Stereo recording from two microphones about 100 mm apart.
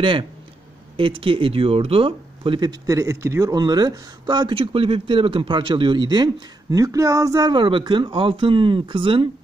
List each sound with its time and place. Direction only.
0.0 s speech: 55° right (ahead or behind)
2.9 s speech: 30° right (ahead or behind)
3.5 s speech: 45° right (ahead or behind)
4.6 s speech: 70° right (ahead or behind); by 7.5 s 35° right (ahead or behind)
7.5 s speech: 55° right (ahead or behind)